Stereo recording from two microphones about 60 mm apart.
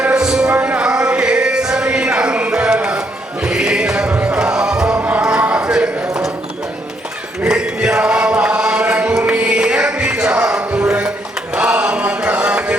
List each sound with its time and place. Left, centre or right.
0.0 s music: centre
2.7 s a sound: right
3.4 s music: centre
4.1 s a sound: right
4.4 s music: centre
4.9 s music: right
5.2 s a sound: centre
7.4 s chant: centre
10.3 s music: centre